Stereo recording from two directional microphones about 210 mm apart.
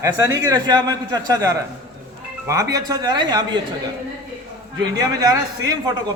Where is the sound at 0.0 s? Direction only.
15° right (ahead or behind).